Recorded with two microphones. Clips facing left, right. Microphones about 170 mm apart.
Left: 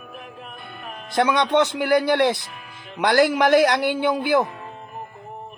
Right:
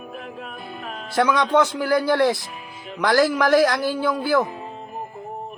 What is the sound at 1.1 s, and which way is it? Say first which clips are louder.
Speech: even; 20° left (ahead or behind).